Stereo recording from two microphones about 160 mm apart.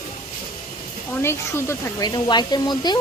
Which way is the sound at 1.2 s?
15° left (ahead or behind).